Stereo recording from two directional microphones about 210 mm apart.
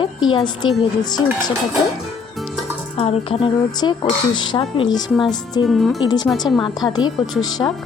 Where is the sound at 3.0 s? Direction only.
25° left (ahead or behind).